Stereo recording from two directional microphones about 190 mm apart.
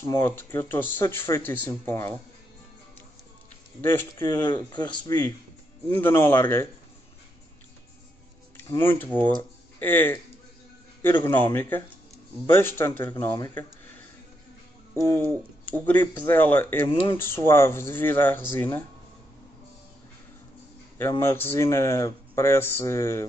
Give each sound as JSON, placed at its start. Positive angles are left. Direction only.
{"t": 0.0, "sound": "speech", "side_deg": 15}
{"t": 3.8, "sound": "speech", "side_deg": 10}
{"t": 4.5, "sound": "speech", "side_deg": 25}
{"t": 5.9, "sound": "speech", "side_deg": 10}
{"t": 8.5, "sound": "speech", "side_deg": 10}
{"t": 15.0, "sound": "speech", "side_deg": 10}
{"t": 16.9, "sound": "speech", "side_deg": 25}
{"t": 17.2, "sound": "speech", "side_deg": 15}
{"t": 21.1, "sound": "speech", "side_deg": 15}